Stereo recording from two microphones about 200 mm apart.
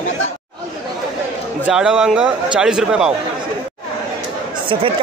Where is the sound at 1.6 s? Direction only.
5° right (ahead or behind).